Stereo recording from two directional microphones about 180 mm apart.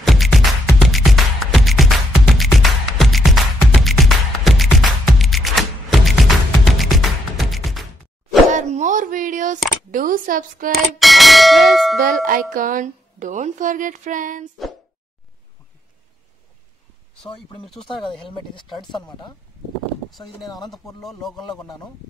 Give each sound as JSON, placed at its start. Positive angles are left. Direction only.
{"t": 0.0, "sound": "music", "side_deg": 0}
{"t": 8.5, "sound": "plop", "side_deg": -45}
{"t": 9.8, "sound": "a woman's voice", "side_deg": -50}
{"t": 10.7, "sound": "clang", "side_deg": 0}
{"t": 12.0, "sound": "a woman's voice", "side_deg": -50}
{"t": 17.6, "sound": "speech", "side_deg": 0}
{"t": 18.2, "sound": "speech", "side_deg": 25}
{"t": 20.1, "sound": "speech", "side_deg": 0}